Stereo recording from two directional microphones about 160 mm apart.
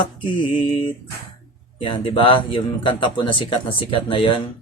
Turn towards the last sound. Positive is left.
turn(degrees=35)  # may be behind; listen again after turning